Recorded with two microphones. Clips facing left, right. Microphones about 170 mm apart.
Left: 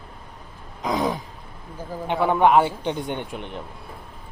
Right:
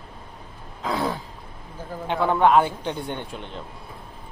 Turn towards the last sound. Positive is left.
turn(degrees=15)  # may be behind; listen again after turning